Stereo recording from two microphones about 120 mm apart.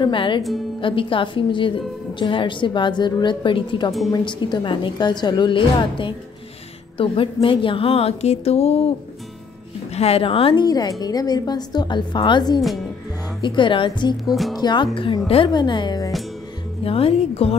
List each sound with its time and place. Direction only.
0.0 s a woman's voice: 45° left (ahead or behind)
9.9 s a woman's voice: 55° left (ahead or behind)
10.5 s a woman's voice: 35° left (ahead or behind)
15.0 s a woman's voice: 50° left (ahead or behind)
16.8 s a woman's voice: 50° left (ahead or behind)